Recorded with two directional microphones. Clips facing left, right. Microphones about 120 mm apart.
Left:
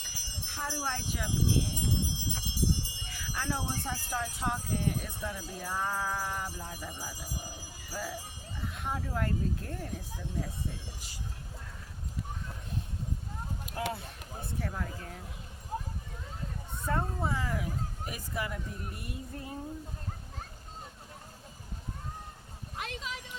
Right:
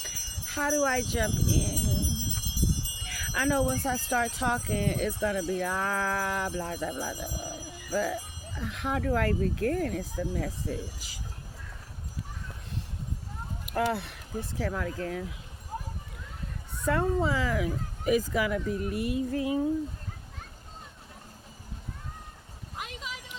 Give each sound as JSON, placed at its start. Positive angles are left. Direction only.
{"t": 0.4, "sound": "speech", "side_deg": -90}
{"t": 2.0, "sound": "music", "side_deg": 25}
{"t": 3.1, "sound": "speech", "side_deg": -90}
{"t": 13.9, "sound": "speech", "side_deg": -75}
{"t": 14.4, "sound": "speech", "side_deg": -90}
{"t": 16.8, "sound": "speech", "side_deg": -90}
{"t": 22.8, "sound": "a sound", "side_deg": -5}